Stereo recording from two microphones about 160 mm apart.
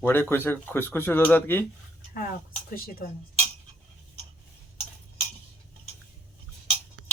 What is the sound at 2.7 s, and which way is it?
Speech, 65° left (ahead or behind).